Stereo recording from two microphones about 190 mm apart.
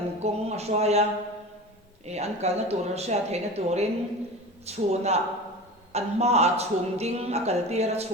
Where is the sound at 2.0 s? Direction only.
35° right (ahead or behind).